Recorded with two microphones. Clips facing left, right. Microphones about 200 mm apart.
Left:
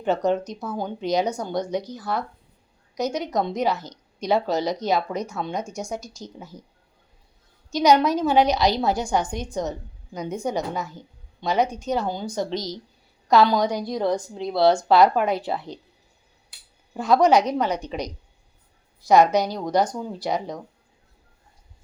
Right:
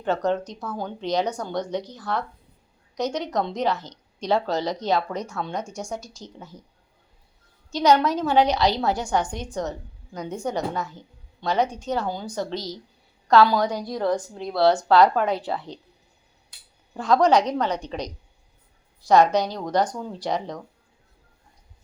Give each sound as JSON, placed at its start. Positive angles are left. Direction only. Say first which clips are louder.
{"t": 0.0, "sound": "a woman's voice", "louder": "left 2 dB", "side_deg": 10}
{"t": 7.7, "sound": "a woman's voice", "louder": "left 1 dB", "side_deg": 15}
{"t": 16.9, "sound": "a woman's voice", "louder": "left 1 dB", "side_deg": 10}